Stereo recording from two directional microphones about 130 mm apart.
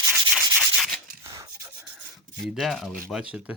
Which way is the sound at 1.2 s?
25° right (ahead or behind).